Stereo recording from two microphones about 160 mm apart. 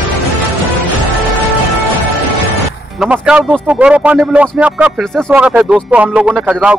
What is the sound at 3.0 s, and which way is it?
Speech, 5° right (ahead or behind).